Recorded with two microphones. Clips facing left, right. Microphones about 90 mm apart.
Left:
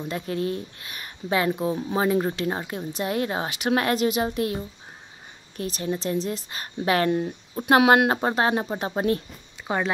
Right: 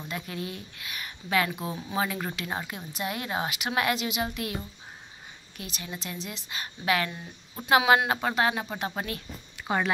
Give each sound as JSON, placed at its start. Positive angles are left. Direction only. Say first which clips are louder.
{"t": 0.1, "sound": "speech", "louder": "left 8 dB", "side_deg": 35}
{"t": 2.6, "sound": "a woman's voice", "louder": "left 7 dB", "side_deg": 25}
{"t": 2.9, "sound": "speech", "louder": "left 6 dB", "side_deg": 35}
{"t": 5.6, "sound": "speech", "louder": "left 11 dB", "side_deg": 35}
{"t": 7.1, "sound": "speech", "louder": "left 17 dB", "side_deg": 50}
{"t": 8.1, "sound": "speech", "louder": "left 4 dB", "side_deg": 35}